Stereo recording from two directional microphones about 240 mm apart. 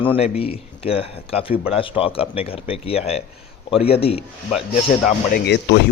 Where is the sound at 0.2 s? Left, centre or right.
Left.